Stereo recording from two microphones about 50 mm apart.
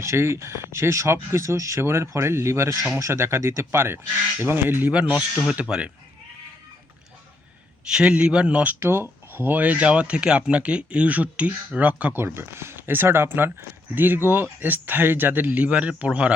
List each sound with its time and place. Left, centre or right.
0.0 s speech: right
4.9 s speech: right
7.9 s a man's voice: centre
8.8 s speech: right
12.1 s speech: right